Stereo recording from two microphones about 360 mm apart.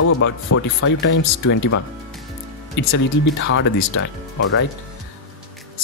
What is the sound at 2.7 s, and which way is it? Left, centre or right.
Speech, left.